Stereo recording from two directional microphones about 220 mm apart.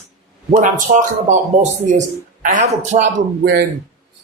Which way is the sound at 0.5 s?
35° right (ahead or behind).